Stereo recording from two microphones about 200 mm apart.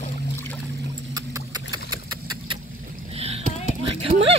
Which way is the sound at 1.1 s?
20° right (ahead or behind).